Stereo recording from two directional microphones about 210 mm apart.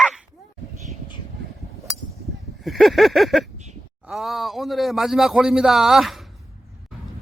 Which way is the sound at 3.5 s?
35° right (ahead or behind).